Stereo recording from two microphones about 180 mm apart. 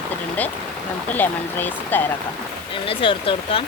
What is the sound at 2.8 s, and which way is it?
Speech, 30° left (ahead or behind).